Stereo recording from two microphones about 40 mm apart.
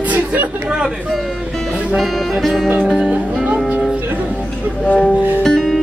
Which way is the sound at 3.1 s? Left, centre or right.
Right.